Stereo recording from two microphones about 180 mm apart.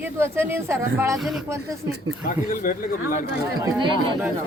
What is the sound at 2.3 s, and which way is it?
Speech, 50° left (ahead or behind).